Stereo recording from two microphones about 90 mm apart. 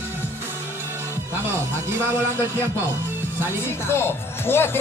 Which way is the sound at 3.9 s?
25° left (ahead or behind).